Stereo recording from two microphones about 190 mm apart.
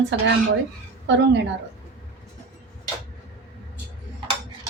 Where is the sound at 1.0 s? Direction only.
65° right (ahead or behind).